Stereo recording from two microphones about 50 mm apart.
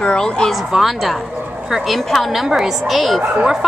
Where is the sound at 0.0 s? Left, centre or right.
Centre.